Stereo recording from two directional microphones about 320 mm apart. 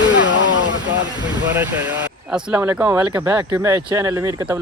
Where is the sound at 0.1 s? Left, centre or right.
Left.